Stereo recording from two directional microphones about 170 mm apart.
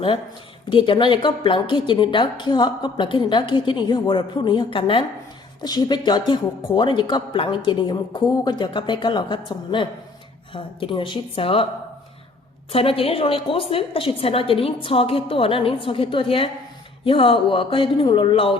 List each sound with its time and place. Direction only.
0.7 s a woman's voice: 30° left (ahead or behind)
12.7 s a woman's voice: 35° left (ahead or behind)